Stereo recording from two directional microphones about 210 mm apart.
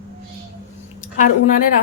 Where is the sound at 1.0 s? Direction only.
35° left (ahead or behind).